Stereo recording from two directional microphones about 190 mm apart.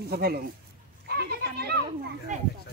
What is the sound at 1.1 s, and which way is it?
Children playing, 55° right (ahead or behind).